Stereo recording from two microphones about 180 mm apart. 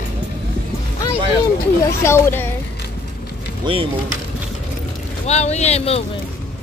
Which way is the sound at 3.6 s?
30° right (ahead or behind).